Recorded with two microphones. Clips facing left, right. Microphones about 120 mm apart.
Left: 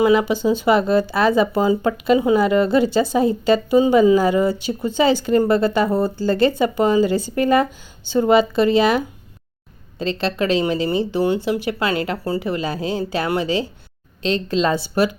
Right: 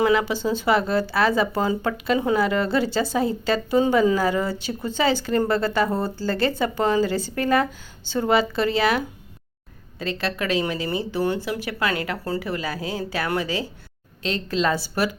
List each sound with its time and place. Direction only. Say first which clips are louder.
0.0 s speech: left 4 dB; 15° left (ahead or behind)